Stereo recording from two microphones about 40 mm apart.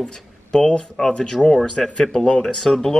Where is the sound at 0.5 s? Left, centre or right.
Left.